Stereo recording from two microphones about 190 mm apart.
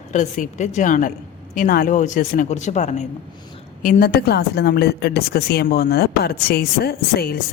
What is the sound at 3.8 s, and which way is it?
A woman's voice, 50° left (ahead or behind).